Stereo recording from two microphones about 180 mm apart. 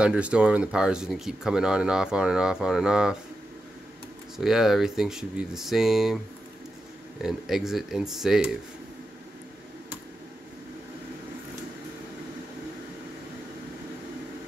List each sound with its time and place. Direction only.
0.0 s speech: 5° right (ahead or behind)
4.4 s speech: centre (ahead or behind)
7.2 s speech: centre (ahead or behind)